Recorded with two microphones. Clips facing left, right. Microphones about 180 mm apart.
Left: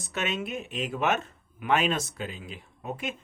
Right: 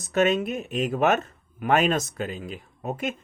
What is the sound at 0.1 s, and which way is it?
Speech, 40° right (ahead or behind).